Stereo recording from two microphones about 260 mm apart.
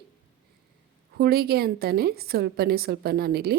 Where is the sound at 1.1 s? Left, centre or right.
Right.